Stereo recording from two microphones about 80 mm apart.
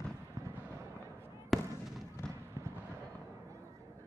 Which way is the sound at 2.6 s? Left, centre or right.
Right.